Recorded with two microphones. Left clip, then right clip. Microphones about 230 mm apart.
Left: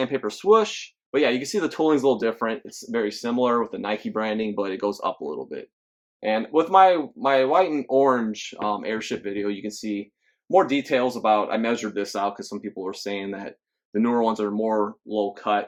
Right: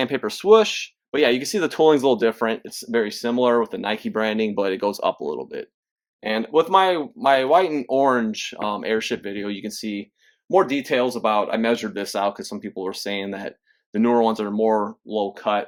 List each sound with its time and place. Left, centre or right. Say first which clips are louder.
0.0 s speech: right 2 dB; right